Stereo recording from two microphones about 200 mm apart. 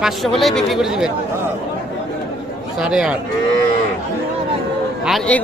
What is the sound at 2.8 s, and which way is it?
Speech, 5° right (ahead or behind).